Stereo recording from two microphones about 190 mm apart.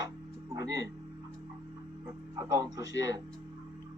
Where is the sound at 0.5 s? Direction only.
15° right (ahead or behind).